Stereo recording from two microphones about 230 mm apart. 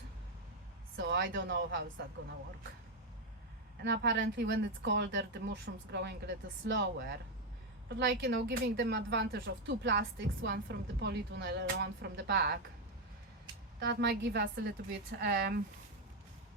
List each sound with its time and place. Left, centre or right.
0.9 s speech: right
3.8 s speech: right
13.7 s speech: right